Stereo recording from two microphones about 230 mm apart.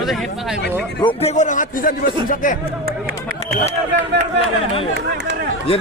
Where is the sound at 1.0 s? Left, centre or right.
Left.